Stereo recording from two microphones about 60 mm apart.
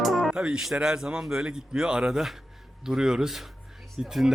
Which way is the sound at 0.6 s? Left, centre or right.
Centre.